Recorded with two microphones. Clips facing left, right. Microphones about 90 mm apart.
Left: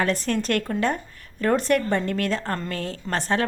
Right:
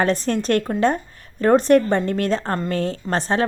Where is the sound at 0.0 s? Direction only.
25° right (ahead or behind).